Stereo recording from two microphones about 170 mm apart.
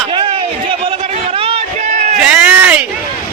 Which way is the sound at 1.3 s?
35° right (ahead or behind).